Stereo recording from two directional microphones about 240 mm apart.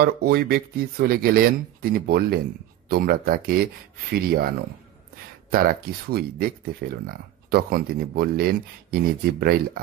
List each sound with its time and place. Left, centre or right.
0.0 s speech: right
5.5 s speech: right